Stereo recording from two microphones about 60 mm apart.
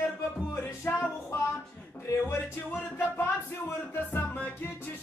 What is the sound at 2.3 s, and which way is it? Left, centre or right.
Music, left.